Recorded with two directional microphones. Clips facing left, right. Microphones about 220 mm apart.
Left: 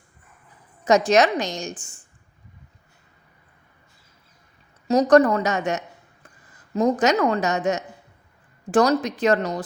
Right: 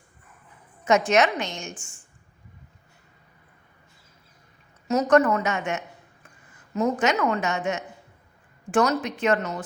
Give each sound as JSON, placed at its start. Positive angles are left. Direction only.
{"t": 0.9, "sound": "a woman's voice", "side_deg": 35}
{"t": 4.9, "sound": "a woman's voice", "side_deg": 35}